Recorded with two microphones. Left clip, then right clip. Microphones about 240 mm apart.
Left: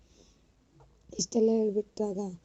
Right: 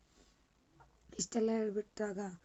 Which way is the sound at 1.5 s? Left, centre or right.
Right.